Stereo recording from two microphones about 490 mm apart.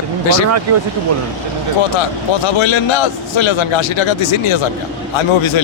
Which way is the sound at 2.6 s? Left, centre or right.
Left.